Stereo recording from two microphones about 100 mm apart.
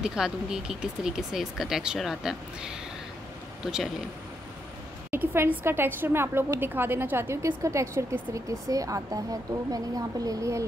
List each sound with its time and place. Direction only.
0.0 s speech: 5° right (ahead or behind)
5.1 s a woman's voice: 25° right (ahead or behind)